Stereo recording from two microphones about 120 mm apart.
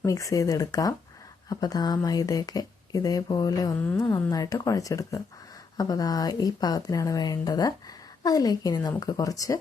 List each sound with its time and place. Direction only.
0.0 s a woman's voice: 25° left (ahead or behind)